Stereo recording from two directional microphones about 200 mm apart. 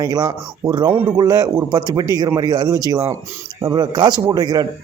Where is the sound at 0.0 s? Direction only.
20° right (ahead or behind).